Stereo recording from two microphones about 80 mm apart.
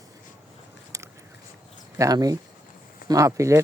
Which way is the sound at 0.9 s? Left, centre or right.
Right.